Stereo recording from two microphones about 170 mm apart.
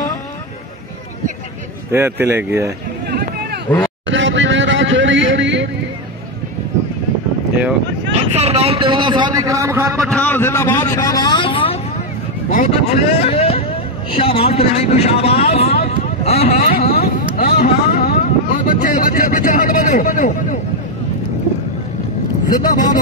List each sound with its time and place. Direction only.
1.9 s speech: 15° right (ahead or behind)
4.1 s a sound: 90° right
8.4 s a sound: 35° right (ahead or behind); by 10.0 s 15° right (ahead or behind)
10.0 s a man's voice: 10° left (ahead or behind); by 11.8 s 30° left (ahead or behind)
12.4 s speech: 45° left (ahead or behind)
15.9 s vehicle: 35° left (ahead or behind)
16.9 s speech: 65° left (ahead or behind)
22.5 s speech: 50° left (ahead or behind)